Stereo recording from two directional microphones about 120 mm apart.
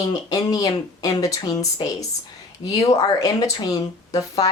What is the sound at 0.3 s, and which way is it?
Speech, 30° left (ahead or behind).